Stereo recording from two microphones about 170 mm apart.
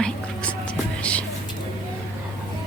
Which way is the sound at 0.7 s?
5° left (ahead or behind).